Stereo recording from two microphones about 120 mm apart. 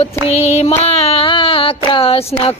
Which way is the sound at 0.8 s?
55° left (ahead or behind).